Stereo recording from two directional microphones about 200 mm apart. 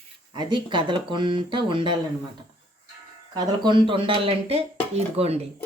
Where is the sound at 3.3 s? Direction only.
20° right (ahead or behind).